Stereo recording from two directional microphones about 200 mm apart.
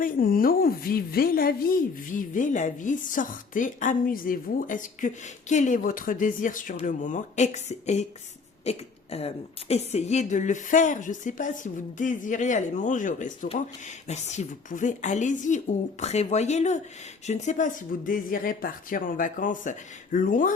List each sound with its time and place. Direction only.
0.0 s a woman's voice: 45° left (ahead or behind)